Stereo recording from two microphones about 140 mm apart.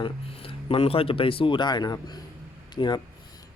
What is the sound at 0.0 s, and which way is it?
Speech, 40° left (ahead or behind).